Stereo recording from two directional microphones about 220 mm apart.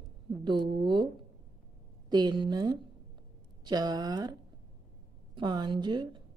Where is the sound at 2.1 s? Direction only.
20° right (ahead or behind).